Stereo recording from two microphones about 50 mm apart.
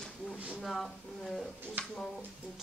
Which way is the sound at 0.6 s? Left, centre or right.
Centre.